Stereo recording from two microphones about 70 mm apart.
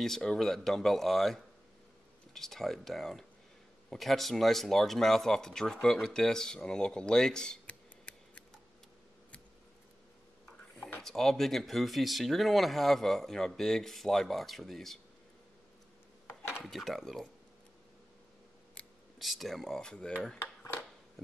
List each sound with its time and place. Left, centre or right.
0.0 s speech: centre
11.0 s speech: centre
16.6 s speech: centre
18.8 s scissors: centre
19.1 s speech: centre